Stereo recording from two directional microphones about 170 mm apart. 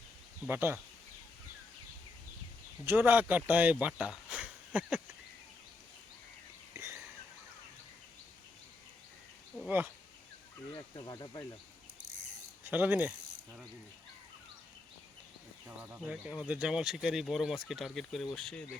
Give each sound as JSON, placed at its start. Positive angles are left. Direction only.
{"t": 0.4, "sound": "speech", "side_deg": -15}
{"t": 2.8, "sound": "speech", "side_deg": -10}
{"t": 6.7, "sound": "a sound", "side_deg": -15}
{"t": 9.6, "sound": "speech", "side_deg": -10}
{"t": 10.7, "sound": "speech", "side_deg": 25}
{"t": 12.6, "sound": "speech", "side_deg": -10}
{"t": 15.6, "sound": "speech", "side_deg": -10}